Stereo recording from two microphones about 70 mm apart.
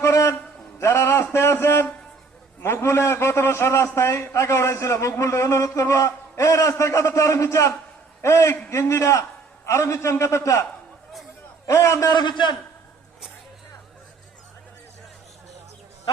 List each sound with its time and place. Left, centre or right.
0.0 s a sound: left
2.6 s a man's voice: left
12.0 s a man's voice: left